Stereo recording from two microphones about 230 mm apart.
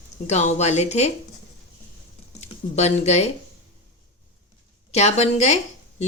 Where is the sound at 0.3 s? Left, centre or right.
Left.